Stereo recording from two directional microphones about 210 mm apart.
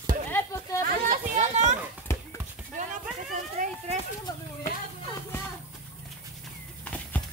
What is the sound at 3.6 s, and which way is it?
Speech, 35° right (ahead or behind).